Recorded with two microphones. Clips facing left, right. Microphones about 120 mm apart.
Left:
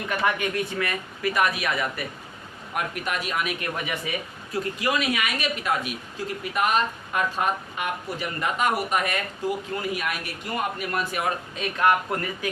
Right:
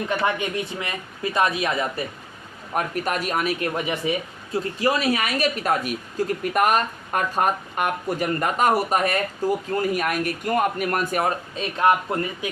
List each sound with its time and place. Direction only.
0.1 s a man's voice: 25° right (ahead or behind)
2.7 s a woman's voice: 40° right (ahead or behind); by 12.5 s 25° right (ahead or behind)